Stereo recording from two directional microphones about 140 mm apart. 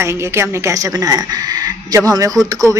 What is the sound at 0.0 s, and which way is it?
A woman's voice, 20° right (ahead or behind).